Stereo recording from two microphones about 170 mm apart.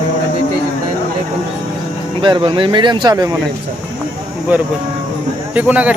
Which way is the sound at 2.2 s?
25° right (ahead or behind).